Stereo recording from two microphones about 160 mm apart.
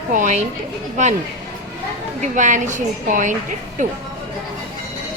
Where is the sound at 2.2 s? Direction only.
50° right (ahead or behind).